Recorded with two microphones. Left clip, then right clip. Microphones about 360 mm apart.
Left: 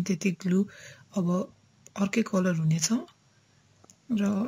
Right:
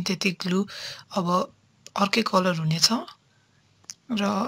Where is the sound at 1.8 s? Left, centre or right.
Centre.